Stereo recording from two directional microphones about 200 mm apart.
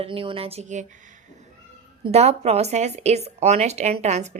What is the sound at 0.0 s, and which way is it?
Speech, 25° right (ahead or behind).